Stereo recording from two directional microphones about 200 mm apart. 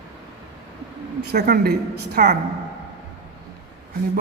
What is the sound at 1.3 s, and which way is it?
A woman's voice, 50° right (ahead or behind).